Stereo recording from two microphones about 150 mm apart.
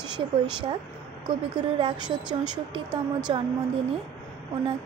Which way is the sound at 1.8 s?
30° right (ahead or behind).